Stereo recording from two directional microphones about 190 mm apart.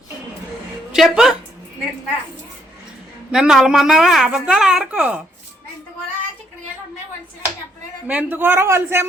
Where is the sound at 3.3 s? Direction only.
Centre (ahead or behind).